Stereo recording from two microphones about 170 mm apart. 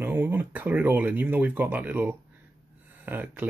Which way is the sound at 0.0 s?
10° right (ahead or behind).